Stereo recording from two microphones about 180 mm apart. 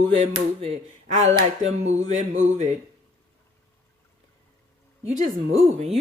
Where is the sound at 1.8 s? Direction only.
40° right (ahead or behind).